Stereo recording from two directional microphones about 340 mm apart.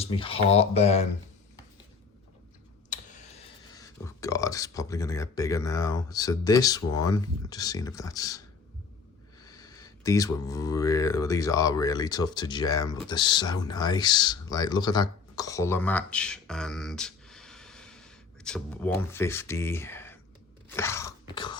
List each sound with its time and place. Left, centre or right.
0.0 s speech: centre
2.9 s tick: left
3.8 s speech: centre
9.4 s speech: centre
20.7 s chewing: centre